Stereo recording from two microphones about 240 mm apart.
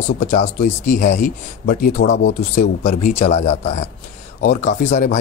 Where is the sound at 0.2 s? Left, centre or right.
Left.